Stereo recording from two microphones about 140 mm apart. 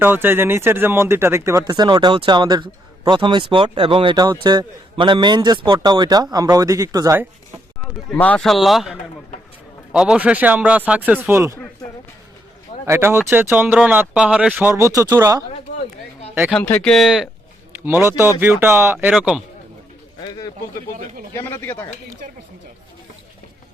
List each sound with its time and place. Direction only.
0.0 s speech: 15° right (ahead or behind)
8.1 s a man's voice: 10° left (ahead or behind); by 11.5 s 15° right (ahead or behind)
12.8 s speech: 20° right (ahead or behind)
16.5 s a man's voice: 10° left (ahead or behind)
17.8 s speech: 15° right (ahead or behind)
19.1 s a man's voice: 5° right (ahead or behind)
21.3 s speech: 15° left (ahead or behind)